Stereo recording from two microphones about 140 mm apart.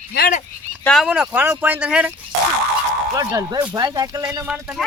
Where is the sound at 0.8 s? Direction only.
Centre (ahead or behind).